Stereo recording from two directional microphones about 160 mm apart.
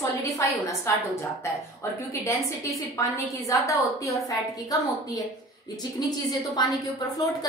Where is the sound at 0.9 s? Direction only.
20° left (ahead or behind).